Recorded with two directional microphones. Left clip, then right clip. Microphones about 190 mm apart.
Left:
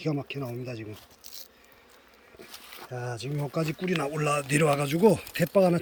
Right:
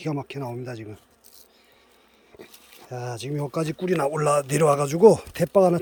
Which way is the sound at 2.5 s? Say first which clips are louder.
Right 1 dB; 5° right (ahead or behind).